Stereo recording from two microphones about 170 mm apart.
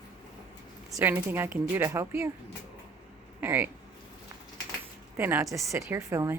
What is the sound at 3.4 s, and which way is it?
Speech, 10° right (ahead or behind).